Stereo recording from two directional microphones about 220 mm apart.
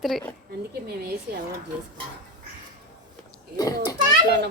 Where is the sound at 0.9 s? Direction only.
45° right (ahead or behind).